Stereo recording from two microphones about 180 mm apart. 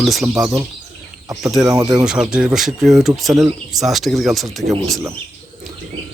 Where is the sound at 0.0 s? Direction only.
Centre (ahead or behind).